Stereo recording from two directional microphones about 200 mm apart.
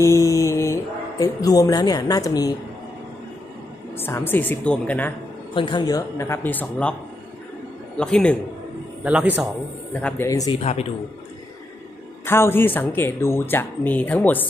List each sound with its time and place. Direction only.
0.0 s mantra: 15° left (ahead or behind)
1.2 s a woman's voice: 20° left (ahead or behind)
3.9 s speech: 10° left (ahead or behind)
5.5 s speech: 25° left (ahead or behind); by 7.0 s 5° left (ahead or behind)
8.0 s a man's voice: 5° left (ahead or behind)
9.0 s a man's voice: 5° right (ahead or behind)
9.9 s speech: 10° left (ahead or behind)
10.6 s a man's voice: 30° left (ahead or behind)
12.3 s speech: 10° left (ahead or behind)